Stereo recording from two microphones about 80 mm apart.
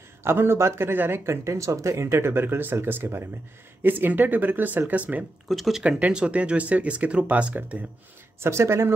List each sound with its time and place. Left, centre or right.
0.2 s speech: right
5.5 s speech: centre
5.9 s speech: centre
8.4 s speech: right